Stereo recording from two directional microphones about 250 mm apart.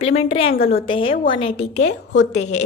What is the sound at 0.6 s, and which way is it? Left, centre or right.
Speech, left.